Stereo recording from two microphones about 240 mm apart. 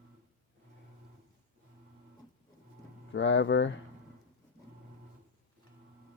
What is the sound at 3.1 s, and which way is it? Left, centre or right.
Speech, left.